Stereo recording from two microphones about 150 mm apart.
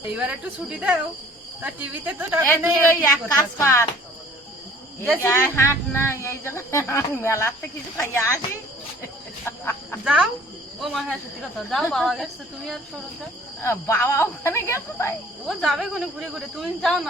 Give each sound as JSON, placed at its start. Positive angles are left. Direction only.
{"t": 0.1, "sound": "speech", "side_deg": -10}
{"t": 2.9, "sound": "a woman's voice", "side_deg": 20}
{"t": 5.1, "sound": "a woman's voice", "side_deg": 15}
{"t": 9.0, "sound": "cricket", "side_deg": 15}
{"t": 10.0, "sound": "speech", "side_deg": -5}
{"t": 13.6, "sound": "speech", "side_deg": 15}
{"t": 15.4, "sound": "speech", "side_deg": 0}